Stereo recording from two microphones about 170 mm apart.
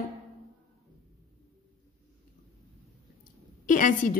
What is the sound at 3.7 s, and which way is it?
Speech, 50° left (ahead or behind).